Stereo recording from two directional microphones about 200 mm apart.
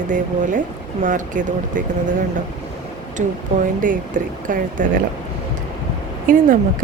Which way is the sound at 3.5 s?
40° right (ahead or behind).